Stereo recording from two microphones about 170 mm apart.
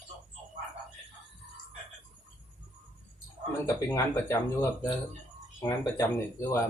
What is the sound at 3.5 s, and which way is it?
Speech, 15° left (ahead or behind).